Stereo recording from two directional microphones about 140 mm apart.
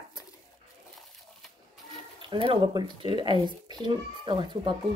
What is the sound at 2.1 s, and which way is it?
Speech, 35° right (ahead or behind).